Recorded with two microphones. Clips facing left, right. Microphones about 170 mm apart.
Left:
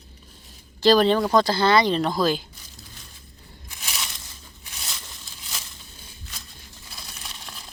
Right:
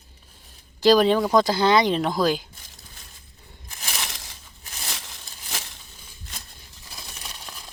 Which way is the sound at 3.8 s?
55° right (ahead or behind).